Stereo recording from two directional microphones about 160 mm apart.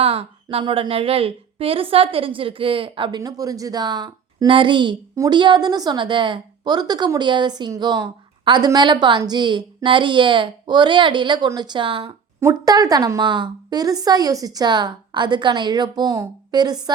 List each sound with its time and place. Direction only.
0.0 s a woman's voice: 40° right (ahead or behind)
3.2 s a woman's voice: 20° right (ahead or behind)
12.4 s a woman's voice: 20° right (ahead or behind)